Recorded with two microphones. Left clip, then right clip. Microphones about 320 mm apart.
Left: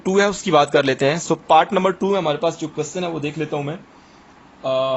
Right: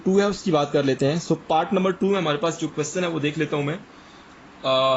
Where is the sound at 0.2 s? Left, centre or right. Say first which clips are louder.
Left 7 dB; left; by 4.9 s centre.